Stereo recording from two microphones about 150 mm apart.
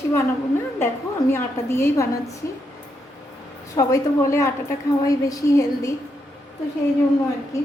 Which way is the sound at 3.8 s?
20° left (ahead or behind).